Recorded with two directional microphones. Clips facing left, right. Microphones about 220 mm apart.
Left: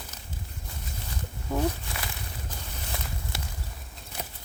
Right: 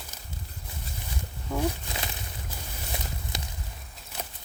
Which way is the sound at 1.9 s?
20° right (ahead or behind).